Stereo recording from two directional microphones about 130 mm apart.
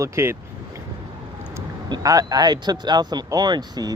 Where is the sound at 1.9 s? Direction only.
30° right (ahead or behind).